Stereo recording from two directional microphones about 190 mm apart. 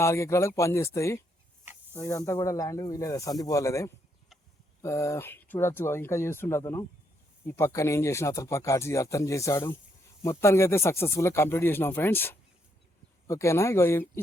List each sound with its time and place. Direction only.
0.0 s speech: 15° left (ahead or behind)